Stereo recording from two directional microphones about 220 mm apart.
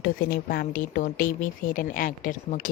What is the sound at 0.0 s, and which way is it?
A woman's voice, 40° left (ahead or behind).